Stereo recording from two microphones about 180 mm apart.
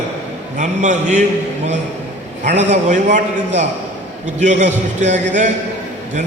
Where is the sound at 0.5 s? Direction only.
40° right (ahead or behind).